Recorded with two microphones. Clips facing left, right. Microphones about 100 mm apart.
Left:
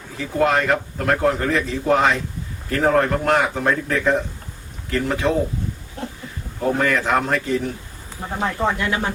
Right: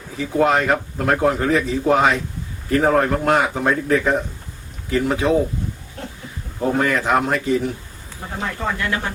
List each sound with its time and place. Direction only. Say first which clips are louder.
0.2 s speech: right 2 dB; 10° right (ahead or behind)
6.7 s speech: right 2 dB; 10° right (ahead or behind)
8.4 s speech: left 3 dB; 20° left (ahead or behind)